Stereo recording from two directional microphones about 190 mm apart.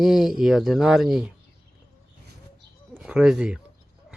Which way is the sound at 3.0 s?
5° right (ahead or behind).